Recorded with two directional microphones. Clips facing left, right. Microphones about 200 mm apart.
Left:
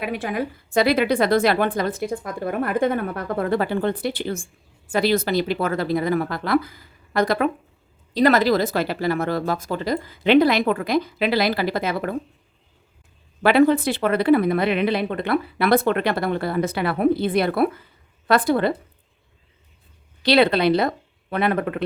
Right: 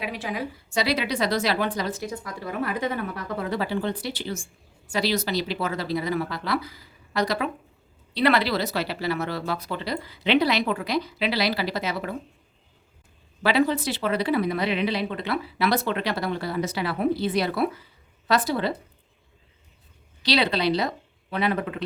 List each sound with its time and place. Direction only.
0.0 s speech: 55° left (ahead or behind)
13.4 s speech: 55° left (ahead or behind)
20.2 s speech: 55° left (ahead or behind)